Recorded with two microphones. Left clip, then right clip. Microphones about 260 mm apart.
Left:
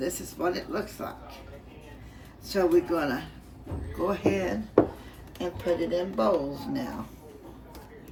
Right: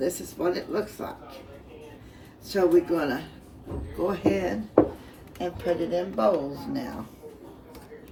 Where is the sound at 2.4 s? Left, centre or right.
Centre.